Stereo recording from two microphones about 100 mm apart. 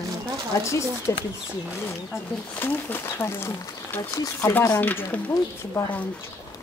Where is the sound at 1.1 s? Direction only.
30° left (ahead or behind).